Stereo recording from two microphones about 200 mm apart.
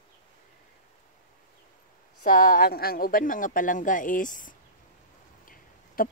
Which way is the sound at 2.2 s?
40° left (ahead or behind).